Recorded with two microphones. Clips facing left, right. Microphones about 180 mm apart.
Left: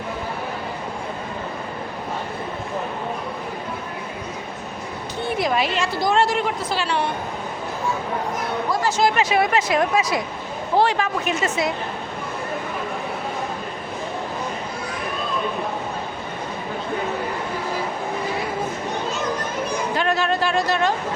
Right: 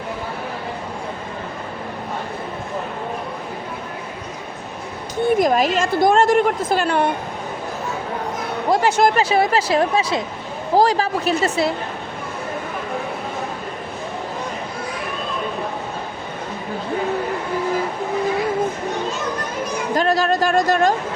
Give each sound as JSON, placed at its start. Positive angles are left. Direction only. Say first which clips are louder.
{"t": 5.4, "sound": "a woman's voice", "louder": "right 1 dB", "side_deg": -45}
{"t": 8.8, "sound": "speech", "louder": "right 3 dB", "side_deg": -60}
{"t": 9.1, "sound": "speech", "louder": "right 2 dB", "side_deg": -30}
{"t": 19.9, "sound": "a sound", "louder": "right 5 dB", "side_deg": -40}